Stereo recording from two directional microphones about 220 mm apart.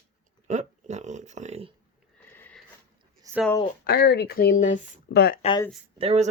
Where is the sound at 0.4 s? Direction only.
30° right (ahead or behind).